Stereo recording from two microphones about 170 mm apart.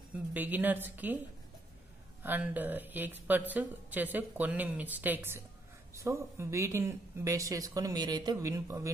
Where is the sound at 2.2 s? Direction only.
10° right (ahead or behind).